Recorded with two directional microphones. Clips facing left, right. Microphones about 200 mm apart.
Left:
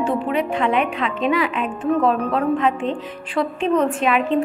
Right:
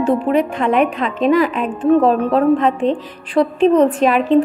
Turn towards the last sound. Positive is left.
turn(degrees=-40)  # may be behind; listen again after turning